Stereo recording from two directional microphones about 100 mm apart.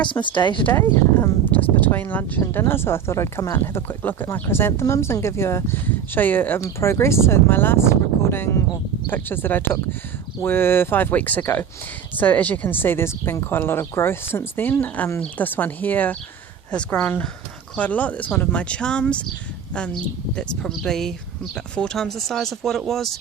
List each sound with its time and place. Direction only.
0.0 s speech: 55° left (ahead or behind)
0.6 s speech: 20° left (ahead or behind); by 23.1 s 5° left (ahead or behind)